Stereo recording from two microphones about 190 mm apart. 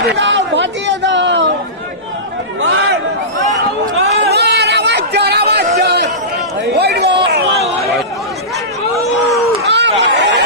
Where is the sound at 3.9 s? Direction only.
60° right (ahead or behind).